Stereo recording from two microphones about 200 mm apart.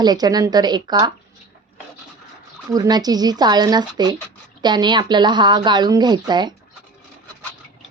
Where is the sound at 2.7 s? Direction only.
20° right (ahead or behind).